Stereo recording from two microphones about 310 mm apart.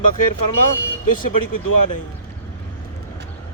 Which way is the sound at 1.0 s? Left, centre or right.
Left.